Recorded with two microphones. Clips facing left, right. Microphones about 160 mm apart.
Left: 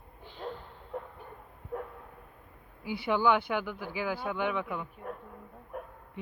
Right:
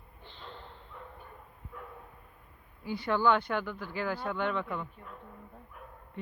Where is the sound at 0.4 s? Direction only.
45° left (ahead or behind).